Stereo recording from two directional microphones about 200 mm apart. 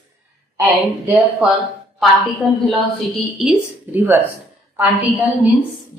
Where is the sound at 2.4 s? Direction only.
Centre (ahead or behind).